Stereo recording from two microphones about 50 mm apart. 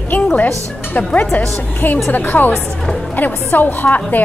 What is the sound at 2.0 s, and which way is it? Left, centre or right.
A woman's voice, left.